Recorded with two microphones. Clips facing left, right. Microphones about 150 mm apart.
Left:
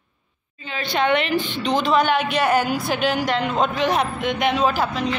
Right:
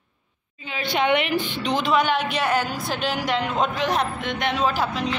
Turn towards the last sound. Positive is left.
turn(degrees=0)  # may be behind; listen again after turning